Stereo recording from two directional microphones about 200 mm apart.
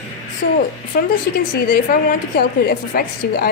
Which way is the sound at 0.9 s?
45° left (ahead or behind).